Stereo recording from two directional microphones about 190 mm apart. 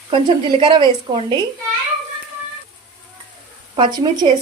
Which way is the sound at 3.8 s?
25° right (ahead or behind).